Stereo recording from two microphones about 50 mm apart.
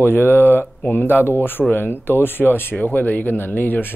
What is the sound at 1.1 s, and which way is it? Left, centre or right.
Speech, left.